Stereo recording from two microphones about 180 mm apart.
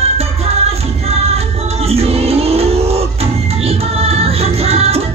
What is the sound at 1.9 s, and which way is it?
Music, 35° right (ahead or behind).